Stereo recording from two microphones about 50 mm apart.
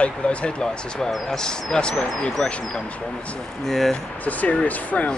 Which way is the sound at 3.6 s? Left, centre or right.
Centre.